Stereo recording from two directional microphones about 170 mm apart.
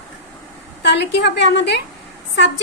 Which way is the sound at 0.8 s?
90° left.